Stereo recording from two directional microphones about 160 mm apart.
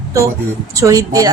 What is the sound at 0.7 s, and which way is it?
Speech, 20° right (ahead or behind).